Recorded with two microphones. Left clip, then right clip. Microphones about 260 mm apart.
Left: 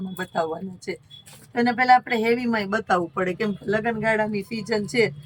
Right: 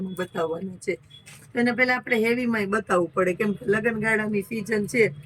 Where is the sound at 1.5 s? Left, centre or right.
Centre.